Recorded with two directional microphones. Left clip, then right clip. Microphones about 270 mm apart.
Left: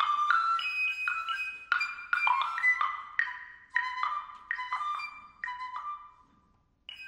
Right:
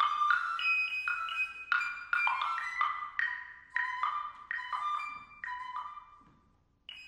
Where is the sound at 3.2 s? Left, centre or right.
Centre.